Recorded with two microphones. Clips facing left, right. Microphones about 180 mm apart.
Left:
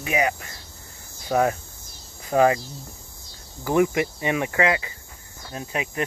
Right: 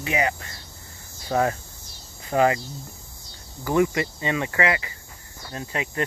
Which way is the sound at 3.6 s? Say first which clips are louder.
Left 1 dB; 15° left (ahead or behind).